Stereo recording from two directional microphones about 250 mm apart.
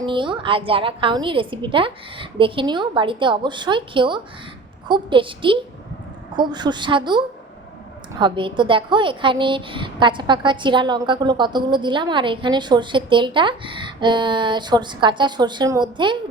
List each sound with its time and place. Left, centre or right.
0.0 s a woman's voice: centre